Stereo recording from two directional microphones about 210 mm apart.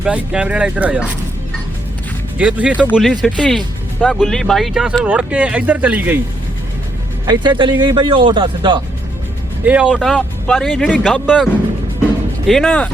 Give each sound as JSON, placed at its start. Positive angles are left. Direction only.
{"t": 0.0, "sound": "speech", "side_deg": -5}
{"t": 2.4, "sound": "speech", "side_deg": -5}
{"t": 7.3, "sound": "speech", "side_deg": -20}
{"t": 9.6, "sound": "speech", "side_deg": -5}
{"t": 12.5, "sound": "speech", "side_deg": 5}